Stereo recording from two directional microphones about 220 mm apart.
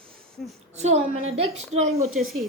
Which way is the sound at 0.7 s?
30° right (ahead or behind).